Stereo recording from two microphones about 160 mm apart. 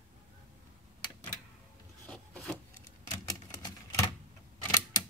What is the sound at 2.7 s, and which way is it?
Typewriter, 15° left (ahead or behind).